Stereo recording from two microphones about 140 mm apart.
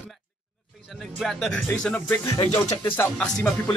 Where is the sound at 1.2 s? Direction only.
5° left (ahead or behind).